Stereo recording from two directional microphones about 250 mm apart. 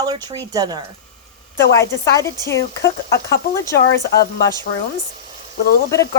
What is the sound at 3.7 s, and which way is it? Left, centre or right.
Speech, left.